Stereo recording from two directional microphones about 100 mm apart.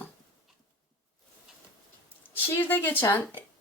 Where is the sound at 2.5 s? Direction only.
20° left (ahead or behind).